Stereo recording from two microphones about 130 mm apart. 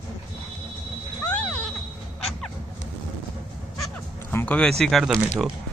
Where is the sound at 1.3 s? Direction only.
10° left (ahead or behind).